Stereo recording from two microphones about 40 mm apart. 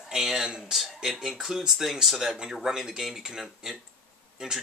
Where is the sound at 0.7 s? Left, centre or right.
Centre.